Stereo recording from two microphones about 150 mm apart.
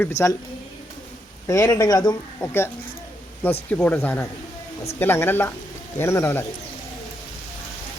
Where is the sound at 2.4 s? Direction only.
15° left (ahead or behind).